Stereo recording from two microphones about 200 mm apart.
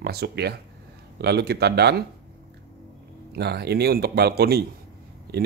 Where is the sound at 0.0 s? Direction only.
55° right (ahead or behind).